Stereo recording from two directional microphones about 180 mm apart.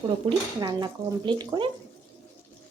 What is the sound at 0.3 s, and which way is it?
Speech, 25° right (ahead or behind).